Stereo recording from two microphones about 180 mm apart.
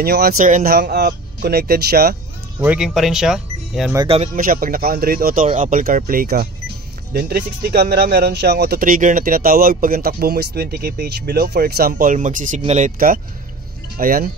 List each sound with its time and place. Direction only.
0.0 s speech: 60° right (ahead or behind)
2.6 s speech: 5° right (ahead or behind)
4.4 s speech: 50° right (ahead or behind)